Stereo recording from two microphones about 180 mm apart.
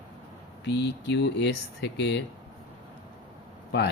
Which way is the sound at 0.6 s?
70° left (ahead or behind).